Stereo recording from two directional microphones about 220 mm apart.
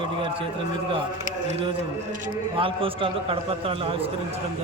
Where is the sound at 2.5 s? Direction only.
25° right (ahead or behind).